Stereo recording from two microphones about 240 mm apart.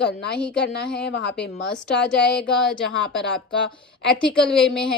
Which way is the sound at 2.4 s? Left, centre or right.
Centre.